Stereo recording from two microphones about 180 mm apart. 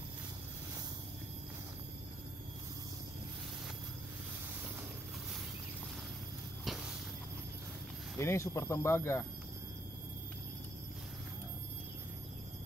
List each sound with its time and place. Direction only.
8.2 s speech: 15° left (ahead or behind)